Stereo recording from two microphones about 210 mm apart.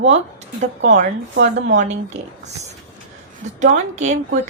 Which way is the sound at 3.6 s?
35° right (ahead or behind).